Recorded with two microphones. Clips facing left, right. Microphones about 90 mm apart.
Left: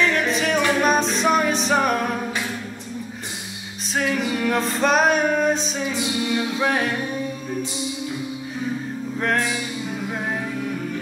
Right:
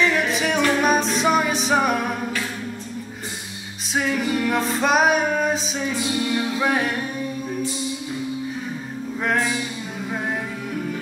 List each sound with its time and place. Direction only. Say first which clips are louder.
0.0 s music: even; centre (ahead or behind)
3.9 s music: right 1 dB; centre (ahead or behind)
5.9 s music: right 1 dB; 20° left (ahead or behind)
6.6 s music: even; 5° right (ahead or behind)
9.2 s music: even; 5° right (ahead or behind)